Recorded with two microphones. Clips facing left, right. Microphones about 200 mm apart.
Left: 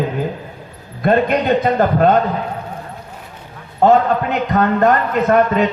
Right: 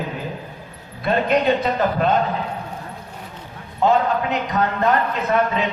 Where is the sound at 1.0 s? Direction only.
50° left (ahead or behind).